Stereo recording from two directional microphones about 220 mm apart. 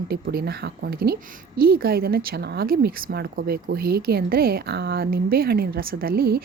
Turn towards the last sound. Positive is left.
turn(degrees=-45)  # may be behind; listen again after turning